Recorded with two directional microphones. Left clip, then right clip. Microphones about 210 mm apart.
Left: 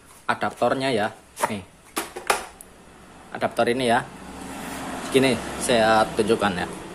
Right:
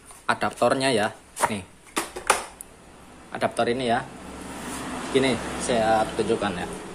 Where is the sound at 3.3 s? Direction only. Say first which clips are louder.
Left 1 dB; centre (ahead or behind).